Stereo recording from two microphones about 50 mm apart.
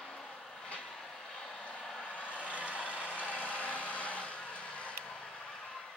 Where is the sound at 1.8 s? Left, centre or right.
Centre.